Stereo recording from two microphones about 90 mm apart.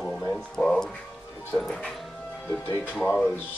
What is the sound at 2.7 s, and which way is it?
Speech, 20° left (ahead or behind).